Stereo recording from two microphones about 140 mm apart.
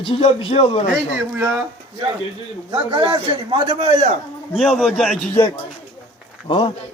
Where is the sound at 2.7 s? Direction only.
35° right (ahead or behind).